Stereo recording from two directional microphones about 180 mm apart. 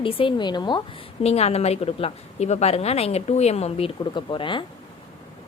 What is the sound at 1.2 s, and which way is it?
A woman's voice, 35° left (ahead or behind).